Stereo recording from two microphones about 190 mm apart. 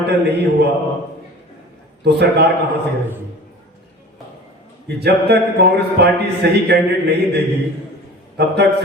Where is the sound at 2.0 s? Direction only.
60° right (ahead or behind).